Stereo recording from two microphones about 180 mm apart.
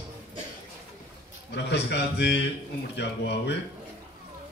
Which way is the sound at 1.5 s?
70° left (ahead or behind).